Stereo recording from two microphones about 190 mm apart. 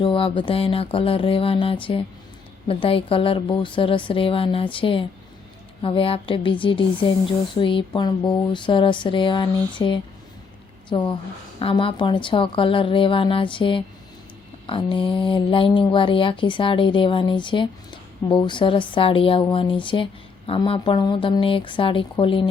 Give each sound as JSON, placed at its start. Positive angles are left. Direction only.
{"t": 0.0, "sound": "speech", "side_deg": 30}